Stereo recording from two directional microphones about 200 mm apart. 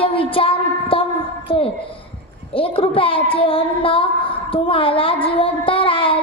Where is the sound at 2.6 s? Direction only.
25° left (ahead or behind).